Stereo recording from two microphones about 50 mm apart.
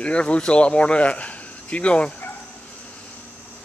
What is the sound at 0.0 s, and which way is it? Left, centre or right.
Speech, left.